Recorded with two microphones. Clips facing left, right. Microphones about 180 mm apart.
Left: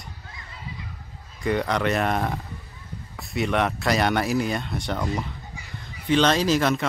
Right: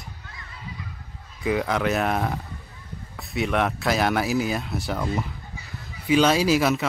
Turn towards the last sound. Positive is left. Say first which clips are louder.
# right 1 dB
turn(degrees=-5)  # may be behind; listen again after turning